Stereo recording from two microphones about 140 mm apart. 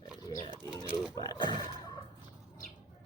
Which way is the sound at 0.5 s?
30° right (ahead or behind).